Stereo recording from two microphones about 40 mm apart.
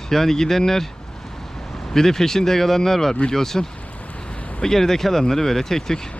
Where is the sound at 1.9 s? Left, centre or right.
Centre.